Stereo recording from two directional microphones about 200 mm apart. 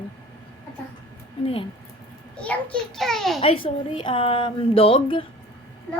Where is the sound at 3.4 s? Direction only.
25° left (ahead or behind).